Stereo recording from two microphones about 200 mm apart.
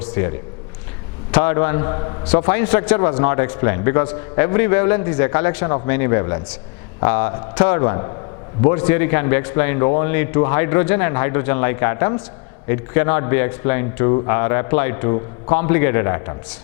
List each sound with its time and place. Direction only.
0.0 s a sound: 10° left (ahead or behind)
1.3 s speech: 15° left (ahead or behind)
2.3 s speech: 10° left (ahead or behind)